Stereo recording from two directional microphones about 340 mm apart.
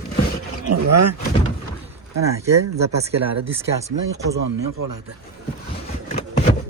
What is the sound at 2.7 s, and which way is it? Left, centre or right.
Speech, centre.